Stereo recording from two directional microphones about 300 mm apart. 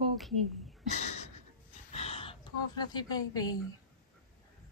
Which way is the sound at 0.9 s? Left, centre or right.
Left.